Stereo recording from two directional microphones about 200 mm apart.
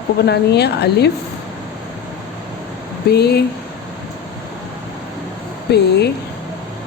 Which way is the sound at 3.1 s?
55° left (ahead or behind).